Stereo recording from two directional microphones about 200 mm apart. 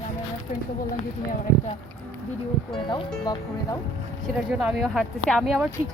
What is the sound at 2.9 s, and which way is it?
Speech, 20° left (ahead or behind).